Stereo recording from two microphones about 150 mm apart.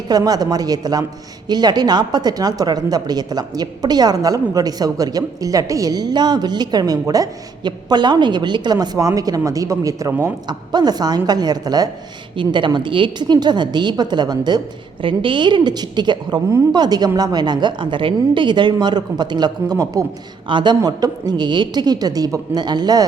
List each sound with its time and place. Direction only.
0.1 s a woman's voice: 25° right (ahead or behind)
10.7 s a woman's voice: 25° right (ahead or behind)